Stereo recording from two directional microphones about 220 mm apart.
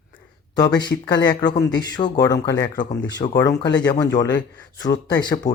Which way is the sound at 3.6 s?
55° left (ahead or behind).